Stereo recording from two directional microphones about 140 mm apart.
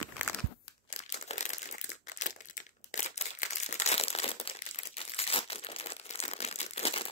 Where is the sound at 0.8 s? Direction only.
55° left (ahead or behind).